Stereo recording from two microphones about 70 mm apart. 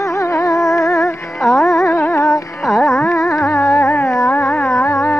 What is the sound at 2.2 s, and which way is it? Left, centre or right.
Carnatic music, left.